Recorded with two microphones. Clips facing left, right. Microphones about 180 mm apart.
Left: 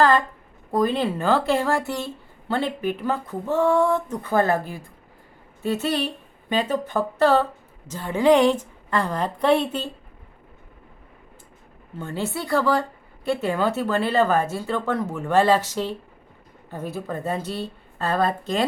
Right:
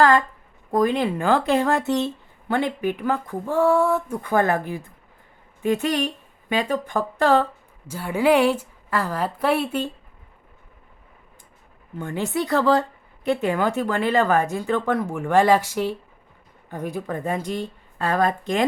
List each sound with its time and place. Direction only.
0.8 s speech: 15° right (ahead or behind)
11.9 s speech: 15° right (ahead or behind)